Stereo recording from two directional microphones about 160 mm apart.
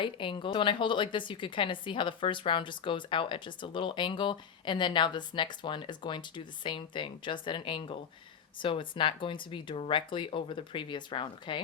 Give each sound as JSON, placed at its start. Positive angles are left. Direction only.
{"t": 0.0, "sound": "a woman's voice", "side_deg": 30}